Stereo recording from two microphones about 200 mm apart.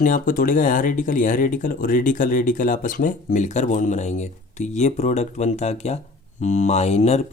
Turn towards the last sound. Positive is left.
turn(degrees=35)  # may be behind; listen again after turning